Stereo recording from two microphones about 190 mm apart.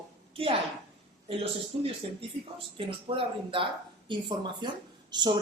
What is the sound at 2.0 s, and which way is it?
Speech, 30° right (ahead or behind).